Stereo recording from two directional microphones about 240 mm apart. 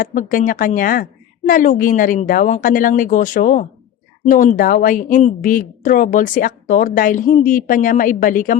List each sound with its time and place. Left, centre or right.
0.0 s a woman's voice: left